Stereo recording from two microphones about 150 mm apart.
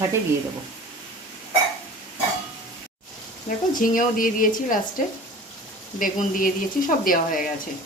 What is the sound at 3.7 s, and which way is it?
Speech, 65° left (ahead or behind).